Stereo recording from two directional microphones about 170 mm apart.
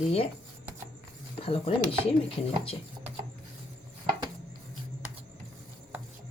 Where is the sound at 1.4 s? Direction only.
35° left (ahead or behind).